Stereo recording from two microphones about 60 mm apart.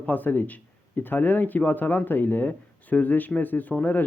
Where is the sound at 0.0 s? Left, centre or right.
Left.